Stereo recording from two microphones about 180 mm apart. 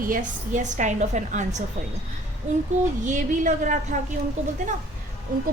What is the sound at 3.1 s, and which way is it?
Speech, 45° right (ahead or behind).